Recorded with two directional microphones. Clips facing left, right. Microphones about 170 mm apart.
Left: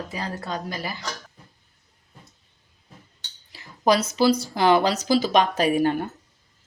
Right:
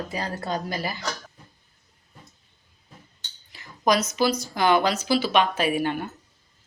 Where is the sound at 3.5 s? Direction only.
30° left (ahead or behind).